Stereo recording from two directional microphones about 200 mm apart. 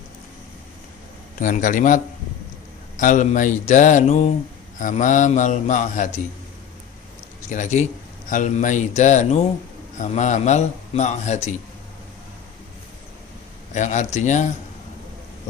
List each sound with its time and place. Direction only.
1.4 s mantra: 40° left (ahead or behind)
3.0 s mantra: 40° left (ahead or behind)
7.5 s mantra: 35° left (ahead or behind)
13.7 s mantra: 35° left (ahead or behind)